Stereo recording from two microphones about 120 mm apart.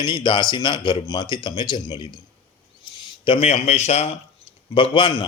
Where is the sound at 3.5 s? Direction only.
70° left (ahead or behind).